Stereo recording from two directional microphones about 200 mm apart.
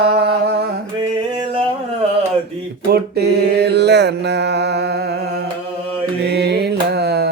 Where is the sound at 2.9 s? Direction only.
55° right (ahead or behind).